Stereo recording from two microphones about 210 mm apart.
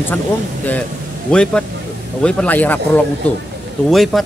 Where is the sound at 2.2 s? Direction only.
5° left (ahead or behind).